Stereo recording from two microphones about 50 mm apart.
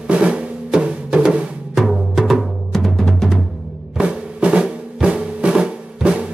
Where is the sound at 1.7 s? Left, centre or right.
Centre.